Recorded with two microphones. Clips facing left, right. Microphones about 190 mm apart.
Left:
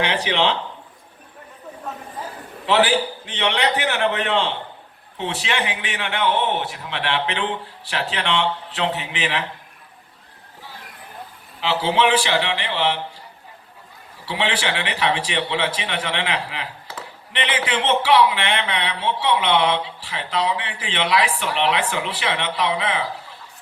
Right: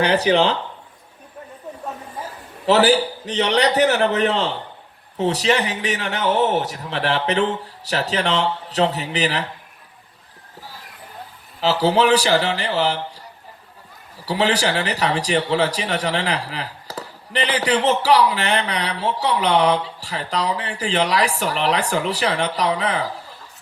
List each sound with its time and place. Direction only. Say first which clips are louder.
0.0 s speech: right 5 dB; 40° right (ahead or behind)
2.6 s speech: right 3 dB; 40° right (ahead or behind)
11.6 s speech: right 3 dB; 40° right (ahead or behind)
14.3 s speech: right 4 dB; 40° right (ahead or behind)